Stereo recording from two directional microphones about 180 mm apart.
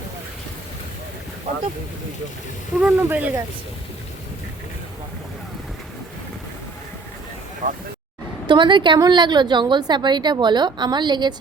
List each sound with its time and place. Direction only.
2.8 s speech: 10° right (ahead or behind)
7.6 s speech: 45° right (ahead or behind)
8.4 s a woman's voice: 25° right (ahead or behind)